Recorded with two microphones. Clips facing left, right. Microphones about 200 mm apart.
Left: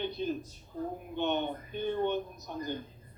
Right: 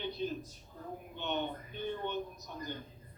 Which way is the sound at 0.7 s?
30° left (ahead or behind).